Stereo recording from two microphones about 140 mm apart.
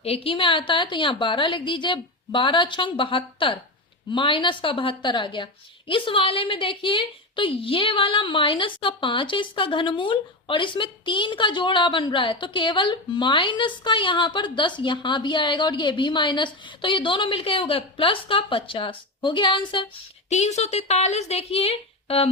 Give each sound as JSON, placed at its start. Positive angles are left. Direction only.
{"t": 0.0, "sound": "a woman's voice", "side_deg": 45}
{"t": 20.3, "sound": "a woman's voice", "side_deg": 55}